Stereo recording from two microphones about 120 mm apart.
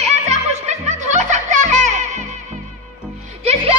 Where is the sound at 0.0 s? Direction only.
70° right (ahead or behind); by 2.2 s 90° right.